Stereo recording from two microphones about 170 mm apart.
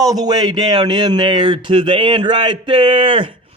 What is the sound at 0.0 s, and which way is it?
Speech, 20° right (ahead or behind).